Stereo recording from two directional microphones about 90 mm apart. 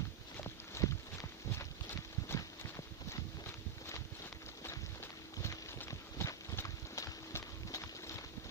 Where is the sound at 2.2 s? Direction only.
35° left (ahead or behind).